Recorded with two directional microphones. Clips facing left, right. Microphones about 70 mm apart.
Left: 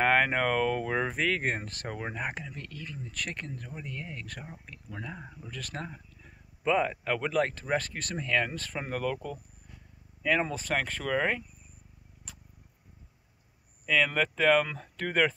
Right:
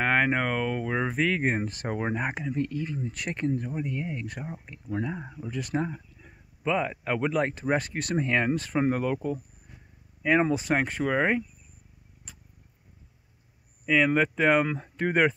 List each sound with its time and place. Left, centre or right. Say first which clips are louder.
0.0 s speech: right 1 dB; centre
1.9 s speech: right 4 dB; right
6.6 s speech: even; centre; by 11.4 s right
13.8 s speech: right 4 dB; centre